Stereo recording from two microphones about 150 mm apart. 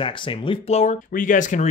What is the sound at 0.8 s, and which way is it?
Speech, 60° left (ahead or behind).